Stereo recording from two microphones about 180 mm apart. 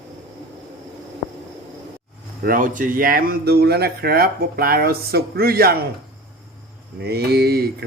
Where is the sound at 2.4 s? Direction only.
50° right (ahead or behind).